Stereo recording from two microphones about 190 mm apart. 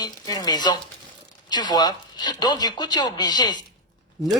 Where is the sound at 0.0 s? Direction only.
20° left (ahead or behind).